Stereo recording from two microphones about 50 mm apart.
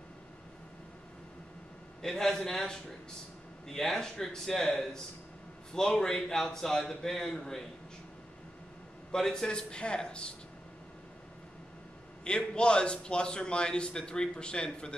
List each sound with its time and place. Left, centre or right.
2.0 s a man's voice: centre
9.1 s a man's voice: centre
12.3 s a man's voice: centre